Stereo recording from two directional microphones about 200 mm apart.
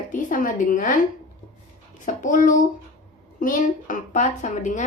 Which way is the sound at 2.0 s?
40° left (ahead or behind).